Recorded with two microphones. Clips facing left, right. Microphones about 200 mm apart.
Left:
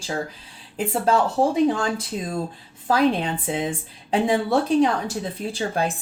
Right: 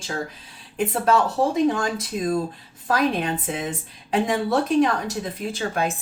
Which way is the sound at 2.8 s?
30° left (ahead or behind).